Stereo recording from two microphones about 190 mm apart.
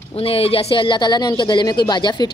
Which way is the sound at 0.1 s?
30° left (ahead or behind).